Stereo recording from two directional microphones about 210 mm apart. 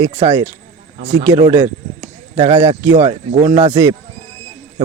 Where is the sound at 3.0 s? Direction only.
35° right (ahead or behind).